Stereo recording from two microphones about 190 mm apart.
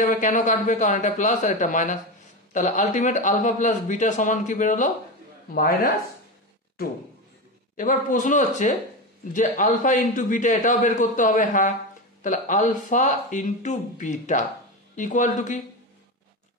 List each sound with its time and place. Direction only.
0.0 s a man's voice: 45° left (ahead or behind)
7.7 s a man's voice: 40° left (ahead or behind)